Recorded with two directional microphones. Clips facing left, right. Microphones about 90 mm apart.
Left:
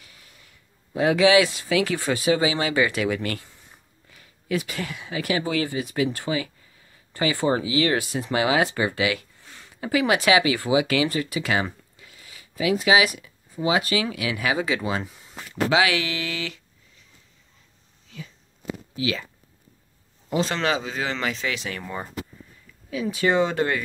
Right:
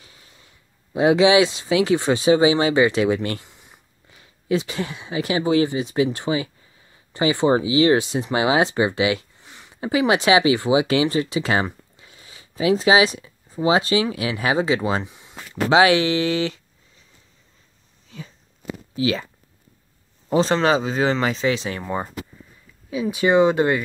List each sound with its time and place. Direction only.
0.0 s speech: 25° right (ahead or behind)
18.9 s speech: 35° right (ahead or behind)
20.2 s speech: 30° right (ahead or behind)